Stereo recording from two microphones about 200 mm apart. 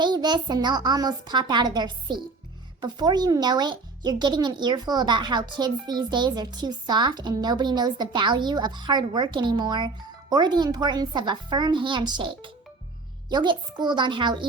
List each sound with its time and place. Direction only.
0.0 s speech: 20° right (ahead or behind)